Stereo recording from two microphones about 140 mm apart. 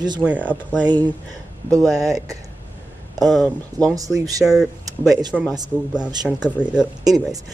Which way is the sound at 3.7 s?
25° right (ahead or behind).